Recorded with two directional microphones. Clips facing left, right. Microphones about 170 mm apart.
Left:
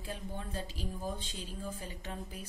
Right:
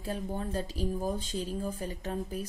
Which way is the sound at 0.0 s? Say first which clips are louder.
Right 7 dB; 40° right (ahead or behind).